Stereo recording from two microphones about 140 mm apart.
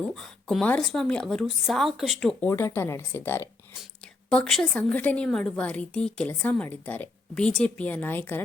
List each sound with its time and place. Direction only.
0.1 s speech: centre (ahead or behind)
2.4 s a woman's voice: 15° left (ahead or behind)
4.3 s a woman's voice: 5° left (ahead or behind)